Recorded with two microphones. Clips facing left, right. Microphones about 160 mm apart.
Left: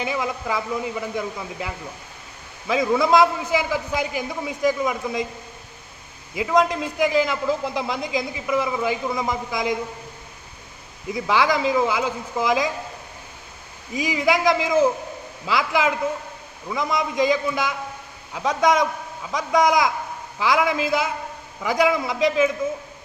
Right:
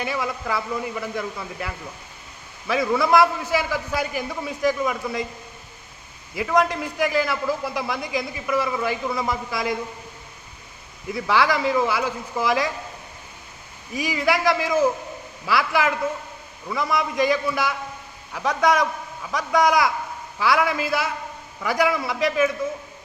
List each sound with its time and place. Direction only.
0.0 s a man's voice: 20° left (ahead or behind)
6.3 s a man's voice: 20° left (ahead or behind)
11.1 s a man's voice: 20° left (ahead or behind)
13.9 s a man's voice: 20° left (ahead or behind)